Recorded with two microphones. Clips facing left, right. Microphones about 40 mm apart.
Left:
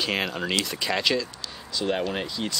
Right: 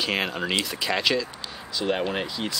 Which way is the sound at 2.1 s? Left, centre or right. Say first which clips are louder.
Right 1 dB; centre.